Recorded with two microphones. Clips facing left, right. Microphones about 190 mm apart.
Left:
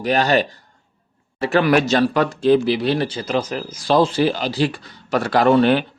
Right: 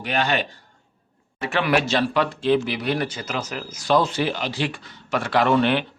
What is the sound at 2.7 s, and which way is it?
A man's voice, 30° left (ahead or behind).